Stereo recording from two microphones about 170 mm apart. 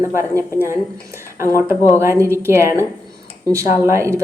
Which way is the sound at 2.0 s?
15° right (ahead or behind).